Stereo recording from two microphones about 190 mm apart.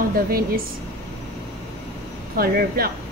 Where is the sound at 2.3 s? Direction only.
50° right (ahead or behind).